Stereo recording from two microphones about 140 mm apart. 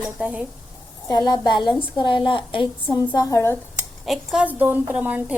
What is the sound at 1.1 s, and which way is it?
A woman's voice, 30° left (ahead or behind).